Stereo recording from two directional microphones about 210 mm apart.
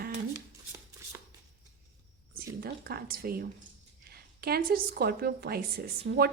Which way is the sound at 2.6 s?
45° right (ahead or behind).